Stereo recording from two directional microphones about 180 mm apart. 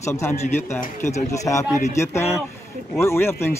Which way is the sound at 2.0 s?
15° left (ahead or behind).